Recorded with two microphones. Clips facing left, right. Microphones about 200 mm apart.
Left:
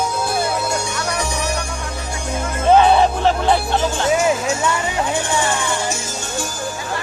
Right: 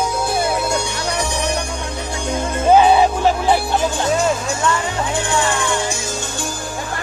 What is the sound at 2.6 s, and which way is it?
Music, 10° right (ahead or behind).